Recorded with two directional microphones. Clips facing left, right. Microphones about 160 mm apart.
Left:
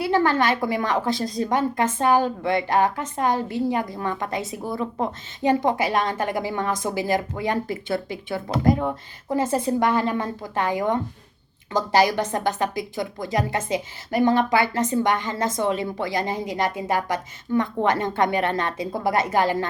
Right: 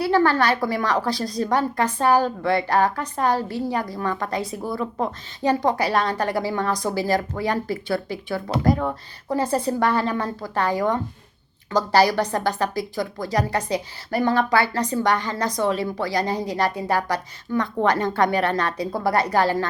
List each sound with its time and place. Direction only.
0.0 s a woman's voice: 20° left (ahead or behind)